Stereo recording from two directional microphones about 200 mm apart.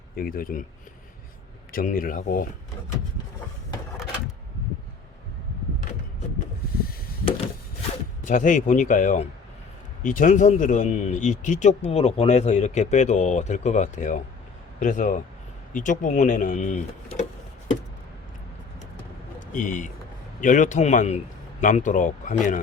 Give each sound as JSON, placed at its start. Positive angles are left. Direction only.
{"t": 0.2, "sound": "speech", "side_deg": 45}
{"t": 1.7, "sound": "speech", "side_deg": 45}
{"t": 8.2, "sound": "speech", "side_deg": 40}
{"t": 19.5, "sound": "speech", "side_deg": 40}